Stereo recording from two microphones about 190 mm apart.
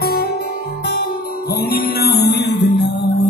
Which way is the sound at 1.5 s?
50° left (ahead or behind).